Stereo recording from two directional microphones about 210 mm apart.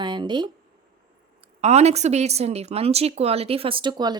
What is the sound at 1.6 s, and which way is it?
A woman's voice, 30° right (ahead or behind).